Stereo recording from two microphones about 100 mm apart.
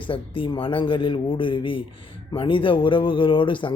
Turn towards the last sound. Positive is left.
turn(degrees=55)  # may be behind; listen again after turning